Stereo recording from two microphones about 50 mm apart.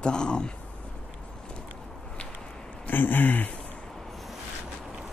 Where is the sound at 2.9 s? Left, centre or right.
Left.